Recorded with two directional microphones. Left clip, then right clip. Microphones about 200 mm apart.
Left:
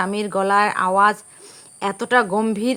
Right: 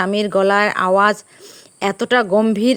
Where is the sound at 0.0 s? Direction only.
25° right (ahead or behind).